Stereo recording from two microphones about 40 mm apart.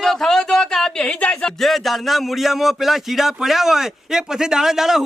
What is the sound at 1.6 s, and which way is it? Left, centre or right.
Speech, centre.